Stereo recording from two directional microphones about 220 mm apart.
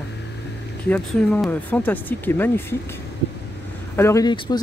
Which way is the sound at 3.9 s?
15° left (ahead or behind).